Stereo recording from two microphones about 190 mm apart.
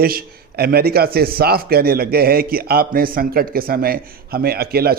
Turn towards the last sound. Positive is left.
turn(degrees=-55)  # may be behind; listen again after turning